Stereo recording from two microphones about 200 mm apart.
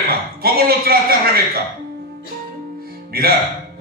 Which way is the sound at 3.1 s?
50° right (ahead or behind).